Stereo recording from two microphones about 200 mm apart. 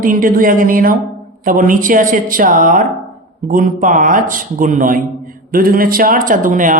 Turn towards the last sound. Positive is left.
turn(degrees=-40)  # may be behind; listen again after turning